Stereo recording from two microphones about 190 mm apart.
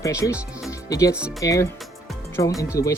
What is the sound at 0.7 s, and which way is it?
Music, 20° left (ahead or behind).